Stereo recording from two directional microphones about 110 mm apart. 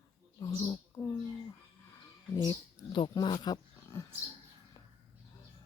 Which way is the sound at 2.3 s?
40° left (ahead or behind).